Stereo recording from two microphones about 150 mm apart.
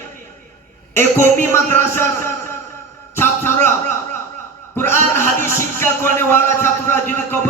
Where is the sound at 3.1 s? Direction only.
15° left (ahead or behind).